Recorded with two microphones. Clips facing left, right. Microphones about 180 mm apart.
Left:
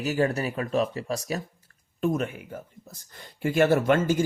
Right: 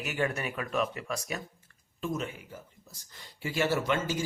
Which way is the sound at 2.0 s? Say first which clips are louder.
Left 8 dB; 55° left (ahead or behind).